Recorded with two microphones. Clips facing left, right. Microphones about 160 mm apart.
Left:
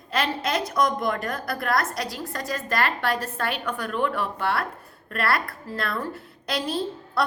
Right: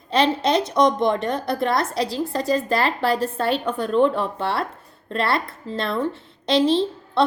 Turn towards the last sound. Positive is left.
turn(degrees=-25)  # may be behind; listen again after turning